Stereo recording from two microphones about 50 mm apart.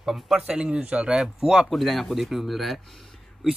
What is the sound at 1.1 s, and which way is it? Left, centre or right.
Speech, centre.